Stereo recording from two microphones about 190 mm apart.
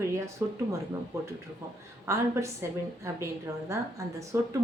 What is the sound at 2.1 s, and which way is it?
A woman's voice, 15° right (ahead or behind).